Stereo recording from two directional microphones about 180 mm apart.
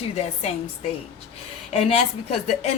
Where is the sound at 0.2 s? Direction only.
35° left (ahead or behind).